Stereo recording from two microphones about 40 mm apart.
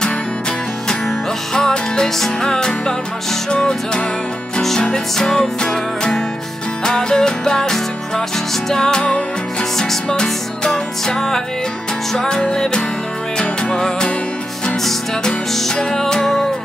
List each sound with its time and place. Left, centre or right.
0.8 s music: centre
9.0 s music: left
10.2 s music: centre
15.5 s music: centre